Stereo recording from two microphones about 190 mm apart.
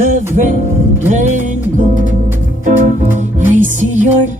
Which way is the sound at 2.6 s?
40° right (ahead or behind).